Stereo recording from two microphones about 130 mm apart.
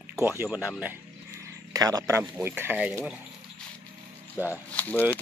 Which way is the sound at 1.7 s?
25° right (ahead or behind).